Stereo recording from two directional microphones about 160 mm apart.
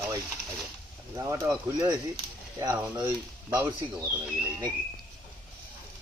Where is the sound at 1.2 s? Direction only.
20° right (ahead or behind).